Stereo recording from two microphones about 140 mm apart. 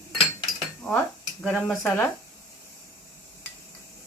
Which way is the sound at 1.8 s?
15° left (ahead or behind).